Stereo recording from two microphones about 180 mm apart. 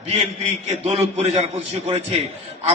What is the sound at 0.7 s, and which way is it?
A man's voice, 35° right (ahead or behind).